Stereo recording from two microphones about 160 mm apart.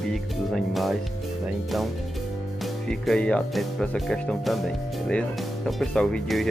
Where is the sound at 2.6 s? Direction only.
5° left (ahead or behind).